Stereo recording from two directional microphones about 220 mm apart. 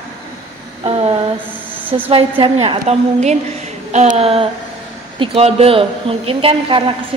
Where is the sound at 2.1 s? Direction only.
25° right (ahead or behind).